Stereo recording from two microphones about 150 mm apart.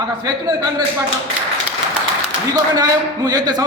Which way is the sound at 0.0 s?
25° right (ahead or behind).